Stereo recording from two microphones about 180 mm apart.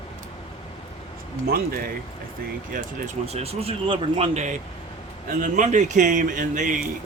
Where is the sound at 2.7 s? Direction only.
45° right (ahead or behind).